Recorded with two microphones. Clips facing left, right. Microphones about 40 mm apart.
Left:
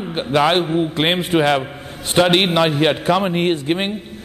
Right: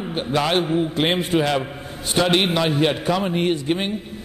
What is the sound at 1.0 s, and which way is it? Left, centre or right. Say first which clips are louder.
Speech: left 2 dB; left.